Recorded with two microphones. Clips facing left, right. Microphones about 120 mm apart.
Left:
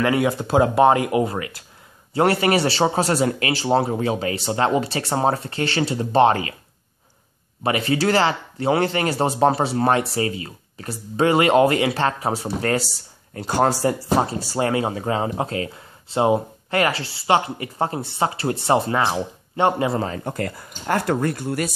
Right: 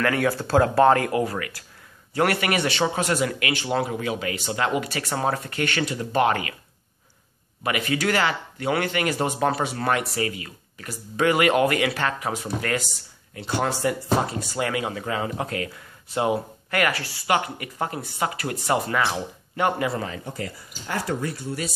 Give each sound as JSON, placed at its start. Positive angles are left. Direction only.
{"t": 0.0, "sound": "a man's voice", "side_deg": 20}
{"t": 7.6, "sound": "speech", "side_deg": 30}
{"t": 20.1, "sound": "speech", "side_deg": 55}